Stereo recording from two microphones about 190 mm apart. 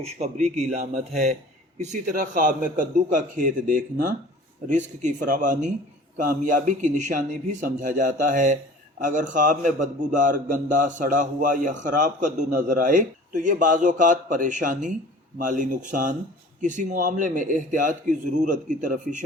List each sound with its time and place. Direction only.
0.0 s a man's voice: 35° right (ahead or behind)